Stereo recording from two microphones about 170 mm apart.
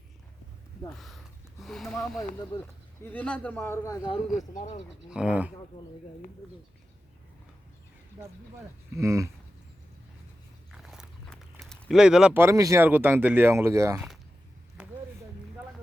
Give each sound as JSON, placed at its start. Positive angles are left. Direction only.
{"t": 0.9, "sound": "speech", "side_deg": 0}
{"t": 4.4, "sound": "speech", "side_deg": 45}
{"t": 5.1, "sound": "speech", "side_deg": -5}
{"t": 9.0, "sound": "speech", "side_deg": -20}
{"t": 10.7, "sound": "speech", "side_deg": 0}
{"t": 14.8, "sound": "a sound", "side_deg": -5}